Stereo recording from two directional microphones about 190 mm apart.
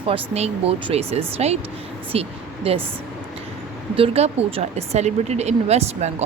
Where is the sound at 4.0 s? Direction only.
35° right (ahead or behind).